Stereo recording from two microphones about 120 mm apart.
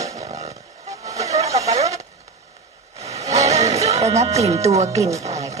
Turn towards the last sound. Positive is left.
turn(degrees=-25)  # may be behind; listen again after turning